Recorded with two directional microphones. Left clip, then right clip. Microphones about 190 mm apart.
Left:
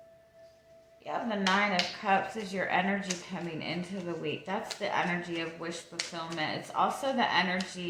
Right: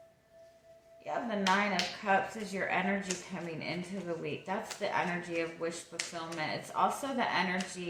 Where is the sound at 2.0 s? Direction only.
25° left (ahead or behind).